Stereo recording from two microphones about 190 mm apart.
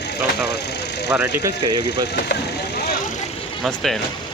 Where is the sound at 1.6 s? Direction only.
25° right (ahead or behind).